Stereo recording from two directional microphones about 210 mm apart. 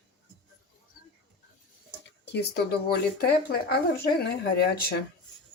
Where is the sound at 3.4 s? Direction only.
50° left (ahead or behind).